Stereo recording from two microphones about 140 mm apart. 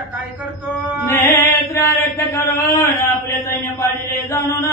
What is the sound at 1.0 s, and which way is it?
Chant, 15° left (ahead or behind).